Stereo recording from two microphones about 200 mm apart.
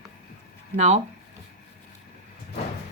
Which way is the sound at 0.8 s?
35° right (ahead or behind).